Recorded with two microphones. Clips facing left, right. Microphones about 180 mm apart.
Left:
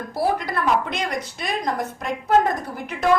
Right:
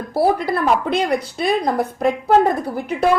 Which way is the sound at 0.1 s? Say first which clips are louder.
Right 6 dB; 30° right (ahead or behind).